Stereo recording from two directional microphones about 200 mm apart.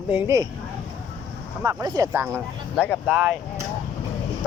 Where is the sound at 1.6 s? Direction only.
15° right (ahead or behind).